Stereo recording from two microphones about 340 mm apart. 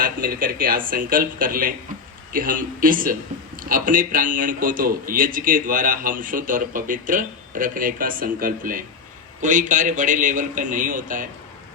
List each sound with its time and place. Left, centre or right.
0.0 s a man's voice: right